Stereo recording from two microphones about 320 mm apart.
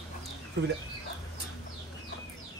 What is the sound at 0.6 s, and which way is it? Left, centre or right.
Speech, right.